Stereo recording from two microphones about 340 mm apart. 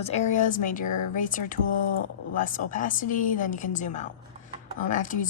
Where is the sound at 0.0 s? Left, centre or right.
Centre.